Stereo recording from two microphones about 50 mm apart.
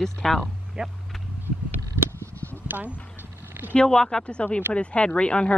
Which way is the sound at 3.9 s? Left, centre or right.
Centre.